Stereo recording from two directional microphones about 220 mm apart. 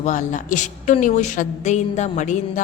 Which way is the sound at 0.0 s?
35° left (ahead or behind).